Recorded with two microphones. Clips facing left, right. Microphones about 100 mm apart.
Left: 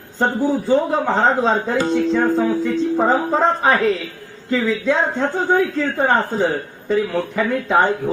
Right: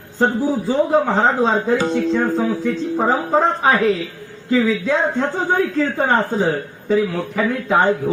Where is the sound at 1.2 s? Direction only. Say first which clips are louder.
Even; centre (ahead or behind).